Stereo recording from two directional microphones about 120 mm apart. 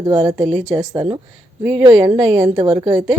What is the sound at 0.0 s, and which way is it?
A woman's voice, 30° right (ahead or behind).